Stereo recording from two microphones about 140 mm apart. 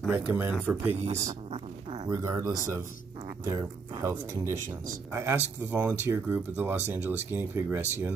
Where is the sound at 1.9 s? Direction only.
30° right (ahead or behind).